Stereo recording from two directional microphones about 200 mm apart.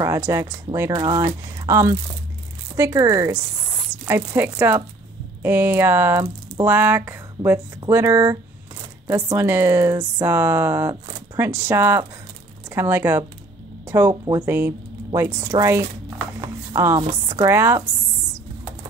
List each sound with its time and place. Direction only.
0.0 s speech: 15° right (ahead or behind)
16.3 s a sound: 15° right (ahead or behind)
17.3 s speech: 15° right (ahead or behind)